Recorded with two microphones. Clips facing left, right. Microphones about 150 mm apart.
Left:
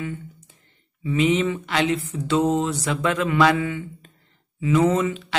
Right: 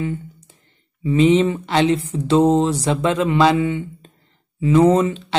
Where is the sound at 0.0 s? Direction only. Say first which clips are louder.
Right 6 dB; 30° right (ahead or behind).